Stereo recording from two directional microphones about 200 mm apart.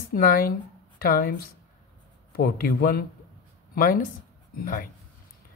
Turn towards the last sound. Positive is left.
turn(degrees=45)  # may be behind; listen again after turning